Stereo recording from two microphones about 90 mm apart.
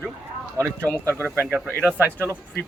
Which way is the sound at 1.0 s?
25° right (ahead or behind).